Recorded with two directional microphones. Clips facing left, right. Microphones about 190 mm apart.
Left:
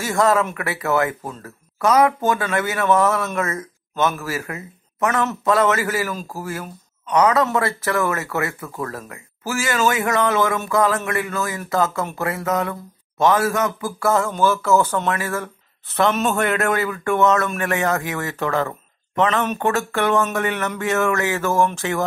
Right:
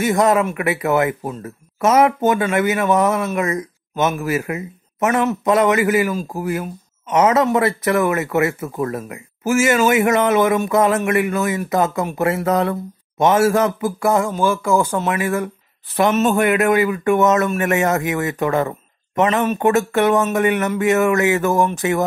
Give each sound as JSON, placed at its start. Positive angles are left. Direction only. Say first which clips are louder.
{"t": 0.0, "sound": "speech", "louder": "right 3 dB", "side_deg": -20}
{"t": 12.3, "sound": "speech", "louder": "right 5 dB", "side_deg": -30}
{"t": 16.1, "sound": "a man's voice", "louder": "right 6 dB", "side_deg": -5}
{"t": 16.3, "sound": "speech", "louder": "right 5 dB", "side_deg": -15}